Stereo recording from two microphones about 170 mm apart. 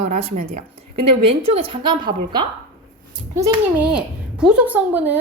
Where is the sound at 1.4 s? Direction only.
35° right (ahead or behind).